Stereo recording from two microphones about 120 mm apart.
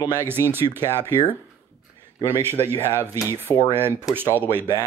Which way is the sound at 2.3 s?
20° right (ahead or behind).